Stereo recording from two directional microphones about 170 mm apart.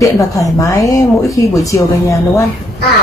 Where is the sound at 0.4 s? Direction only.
20° left (ahead or behind).